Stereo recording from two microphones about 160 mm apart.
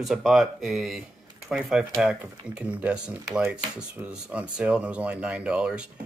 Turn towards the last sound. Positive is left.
turn(degrees=-5)  # may be behind; listen again after turning